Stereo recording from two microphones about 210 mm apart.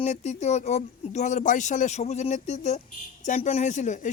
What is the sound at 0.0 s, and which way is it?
Speech, 35° left (ahead or behind).